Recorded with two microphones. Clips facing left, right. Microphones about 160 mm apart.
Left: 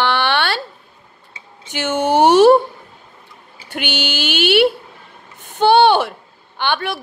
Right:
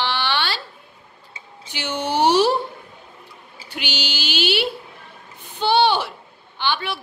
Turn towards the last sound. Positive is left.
turn(degrees=50)  # may be behind; listen again after turning